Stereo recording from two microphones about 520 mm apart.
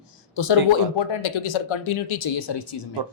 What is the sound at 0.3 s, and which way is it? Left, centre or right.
Speech, left.